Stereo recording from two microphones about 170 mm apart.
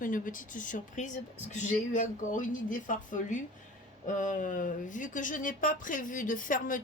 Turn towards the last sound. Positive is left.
turn(degrees=50)  # may be behind; listen again after turning